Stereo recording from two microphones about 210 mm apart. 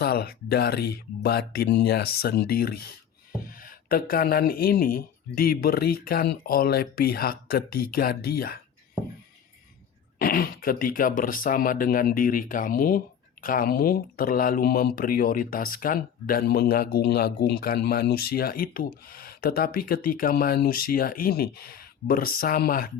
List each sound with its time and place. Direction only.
0.0 s speech: 50° left (ahead or behind)
10.2 s speech: 45° left (ahead or behind)